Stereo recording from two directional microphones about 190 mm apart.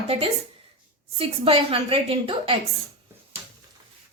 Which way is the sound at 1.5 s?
30° right (ahead or behind).